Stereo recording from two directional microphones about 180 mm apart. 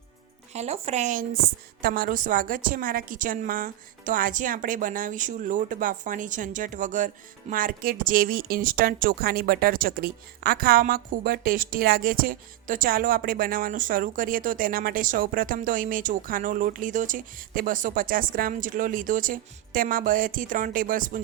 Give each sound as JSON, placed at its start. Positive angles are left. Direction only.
{"t": 0.5, "sound": "a woman's voice", "side_deg": -35}